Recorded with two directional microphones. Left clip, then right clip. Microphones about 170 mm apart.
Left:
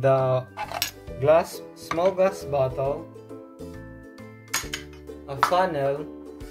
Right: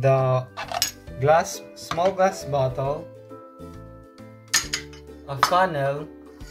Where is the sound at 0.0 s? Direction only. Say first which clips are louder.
Even; 30° left (ahead or behind).